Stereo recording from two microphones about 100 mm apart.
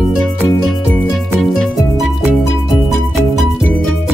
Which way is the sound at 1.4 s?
Centre (ahead or behind).